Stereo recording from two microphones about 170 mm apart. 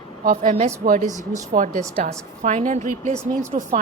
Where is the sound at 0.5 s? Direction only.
45° right (ahead or behind).